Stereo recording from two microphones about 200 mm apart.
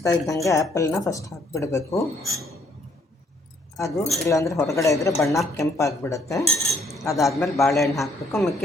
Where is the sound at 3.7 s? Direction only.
15° left (ahead or behind).